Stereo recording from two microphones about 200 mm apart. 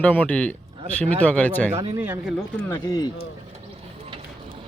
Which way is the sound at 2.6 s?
15° left (ahead or behind).